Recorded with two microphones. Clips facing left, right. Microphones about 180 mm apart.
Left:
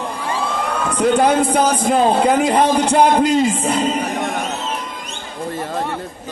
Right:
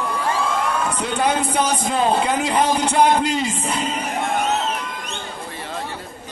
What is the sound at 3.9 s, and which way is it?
Music, 60° left (ahead or behind).